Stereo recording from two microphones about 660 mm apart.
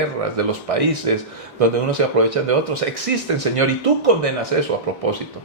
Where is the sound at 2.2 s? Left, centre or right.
Right.